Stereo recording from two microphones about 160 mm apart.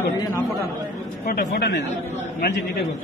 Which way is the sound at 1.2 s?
75° left (ahead or behind).